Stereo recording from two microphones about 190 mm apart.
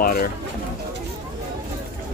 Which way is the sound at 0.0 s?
55° left (ahead or behind).